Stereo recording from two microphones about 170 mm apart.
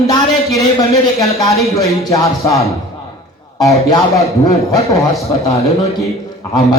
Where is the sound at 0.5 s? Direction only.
20° left (ahead or behind).